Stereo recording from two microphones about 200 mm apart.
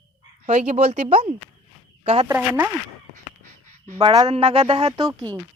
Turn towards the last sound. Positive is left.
turn(degrees=-25)  # may be behind; listen again after turning